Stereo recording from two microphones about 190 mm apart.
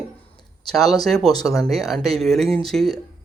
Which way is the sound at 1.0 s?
Centre (ahead or behind).